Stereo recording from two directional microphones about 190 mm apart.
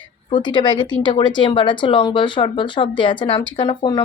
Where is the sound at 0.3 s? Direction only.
25° left (ahead or behind).